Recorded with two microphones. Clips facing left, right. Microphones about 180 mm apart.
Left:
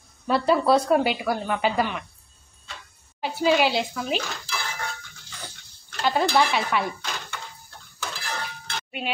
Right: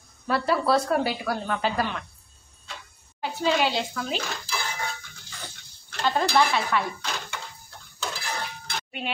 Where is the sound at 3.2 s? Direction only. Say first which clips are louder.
Left 3 dB; 10° left (ahead or behind).